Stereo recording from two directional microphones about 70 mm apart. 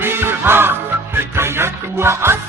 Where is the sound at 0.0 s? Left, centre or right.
Right.